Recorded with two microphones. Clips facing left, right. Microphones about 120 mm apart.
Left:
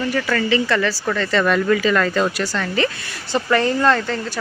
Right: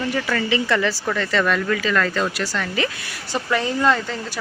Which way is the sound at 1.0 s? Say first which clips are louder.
Left 2 dB; 5° right (ahead or behind).